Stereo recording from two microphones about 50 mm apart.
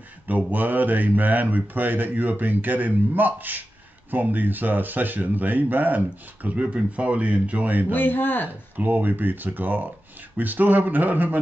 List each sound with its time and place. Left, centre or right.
0.5 s speech: right
7.9 s speech: left
8.7 s speech: right